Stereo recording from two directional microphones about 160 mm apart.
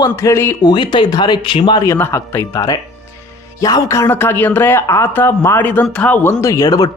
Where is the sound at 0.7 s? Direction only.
30° left (ahead or behind).